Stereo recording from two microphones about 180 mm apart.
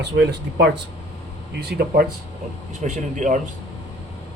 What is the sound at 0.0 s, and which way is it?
Speech, 70° right (ahead or behind).